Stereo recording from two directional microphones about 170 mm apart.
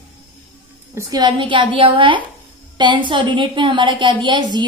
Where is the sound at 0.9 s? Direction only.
25° right (ahead or behind).